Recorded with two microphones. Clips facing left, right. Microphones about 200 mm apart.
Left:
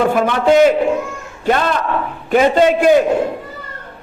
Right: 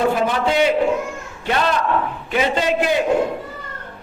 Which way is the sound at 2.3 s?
45° left (ahead or behind).